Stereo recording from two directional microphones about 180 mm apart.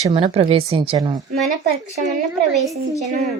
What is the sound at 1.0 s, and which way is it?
Speech, 20° right (ahead or behind).